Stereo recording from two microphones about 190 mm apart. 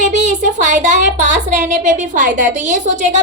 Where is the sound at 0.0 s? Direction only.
40° right (ahead or behind).